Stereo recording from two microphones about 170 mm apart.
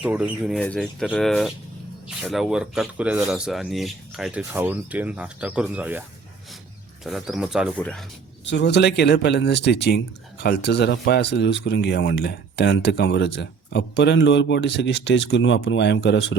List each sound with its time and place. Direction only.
0.0 s speech: 5° right (ahead or behind)
7.0 s speech: centre (ahead or behind)
8.4 s speech: 85° left